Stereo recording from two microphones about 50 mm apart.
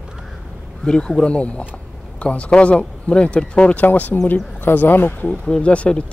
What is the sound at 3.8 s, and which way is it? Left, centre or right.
Speech, left.